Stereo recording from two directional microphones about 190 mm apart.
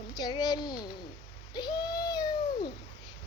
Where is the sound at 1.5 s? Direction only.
25° left (ahead or behind).